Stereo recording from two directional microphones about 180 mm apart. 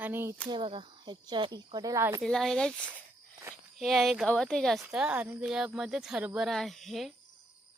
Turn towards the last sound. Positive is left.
turn(degrees=0)  # may be behind; listen again after turning